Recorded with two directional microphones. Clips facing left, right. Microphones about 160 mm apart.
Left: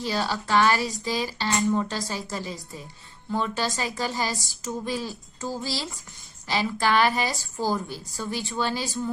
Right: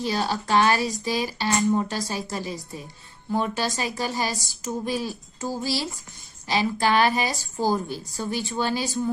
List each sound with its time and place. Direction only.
0.0 s a woman's voice: 20° right (ahead or behind)